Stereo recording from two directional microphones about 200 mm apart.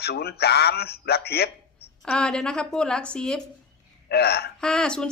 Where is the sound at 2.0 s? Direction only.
5° left (ahead or behind).